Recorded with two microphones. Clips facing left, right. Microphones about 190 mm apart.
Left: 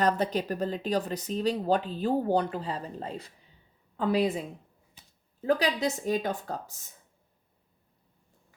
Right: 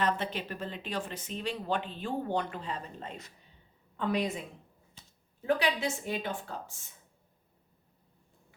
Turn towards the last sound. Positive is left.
turn(degrees=40)  # may be behind; listen again after turning